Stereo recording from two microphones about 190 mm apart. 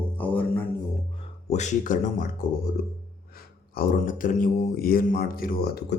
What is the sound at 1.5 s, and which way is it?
Speech, 40° left (ahead or behind).